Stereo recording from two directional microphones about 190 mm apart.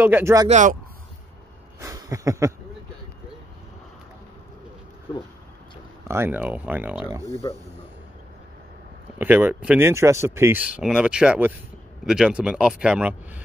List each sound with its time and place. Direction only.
0.0 s speech: 10° right (ahead or behind)
0.5 s speech: 40° right (ahead or behind)
1.8 s a sound: 20° right (ahead or behind)
6.0 s speech: 15° right (ahead or behind)
7.1 s speech: 20° right (ahead or behind)
9.2 s speech: 10° right (ahead or behind)